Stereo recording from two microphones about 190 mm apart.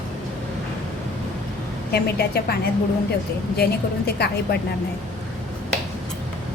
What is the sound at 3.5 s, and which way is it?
A woman's voice, 55° left (ahead or behind).